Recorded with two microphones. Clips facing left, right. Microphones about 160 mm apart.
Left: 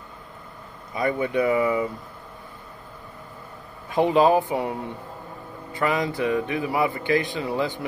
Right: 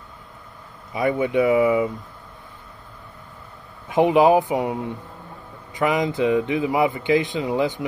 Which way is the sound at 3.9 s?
20° right (ahead or behind).